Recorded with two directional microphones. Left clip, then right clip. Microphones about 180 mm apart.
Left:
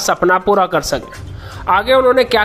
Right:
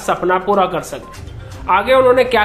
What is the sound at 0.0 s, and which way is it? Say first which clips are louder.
Speech: left 3 dB; 40° left (ahead or behind).